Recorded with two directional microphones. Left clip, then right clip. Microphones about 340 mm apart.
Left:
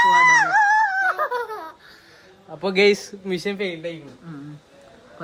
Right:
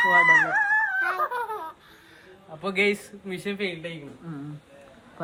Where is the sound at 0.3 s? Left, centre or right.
Left.